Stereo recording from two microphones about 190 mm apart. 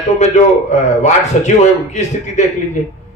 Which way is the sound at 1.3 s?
40° left (ahead or behind).